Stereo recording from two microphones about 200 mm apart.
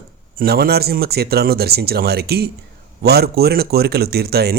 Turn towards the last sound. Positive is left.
turn(degrees=-55)  # may be behind; listen again after turning